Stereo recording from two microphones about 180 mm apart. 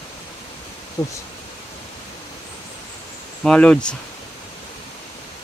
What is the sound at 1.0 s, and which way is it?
Speech, 20° left (ahead or behind).